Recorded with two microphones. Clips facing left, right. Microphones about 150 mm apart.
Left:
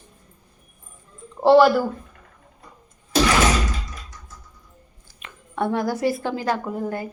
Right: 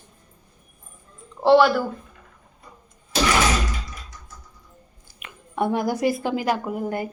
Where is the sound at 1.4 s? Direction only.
Centre (ahead or behind).